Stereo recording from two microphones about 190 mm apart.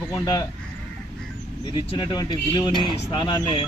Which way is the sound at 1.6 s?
25° left (ahead or behind).